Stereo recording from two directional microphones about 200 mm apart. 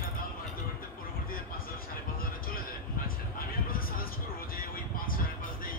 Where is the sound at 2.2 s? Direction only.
45° left (ahead or behind).